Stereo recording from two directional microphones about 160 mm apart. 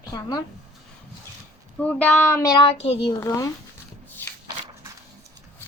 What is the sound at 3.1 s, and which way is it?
Speech, 20° left (ahead or behind).